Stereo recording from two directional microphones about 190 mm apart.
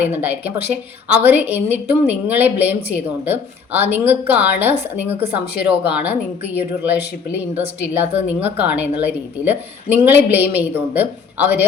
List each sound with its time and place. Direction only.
0.0 s speech: 10° right (ahead or behind)
5.1 s speech: 30° right (ahead or behind)
5.5 s speech: 10° right (ahead or behind)